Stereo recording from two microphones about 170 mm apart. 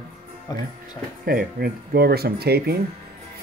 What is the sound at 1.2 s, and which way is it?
Speech, 65° right (ahead or behind).